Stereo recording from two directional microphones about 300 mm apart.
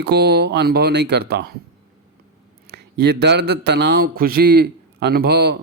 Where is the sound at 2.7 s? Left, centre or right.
Right.